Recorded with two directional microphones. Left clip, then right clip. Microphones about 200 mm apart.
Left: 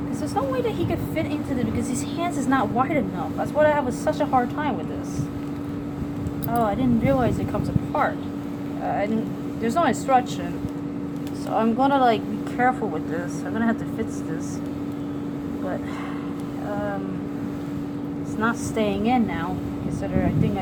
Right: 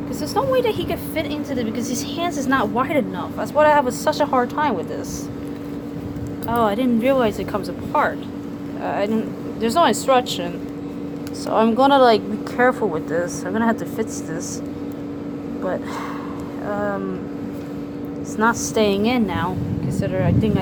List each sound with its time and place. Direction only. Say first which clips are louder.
0.3 s a woman's voice: right 6 dB; 40° right (ahead or behind)
6.5 s speech: right 4 dB; 45° right (ahead or behind)
9.6 s a woman's voice: right 5 dB; 40° right (ahead or behind)
11.5 s speech: right 6 dB; 45° right (ahead or behind)
18.3 s speech: right 6 dB; 45° right (ahead or behind)